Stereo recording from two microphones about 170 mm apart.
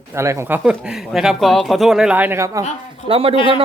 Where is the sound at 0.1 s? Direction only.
15° right (ahead or behind).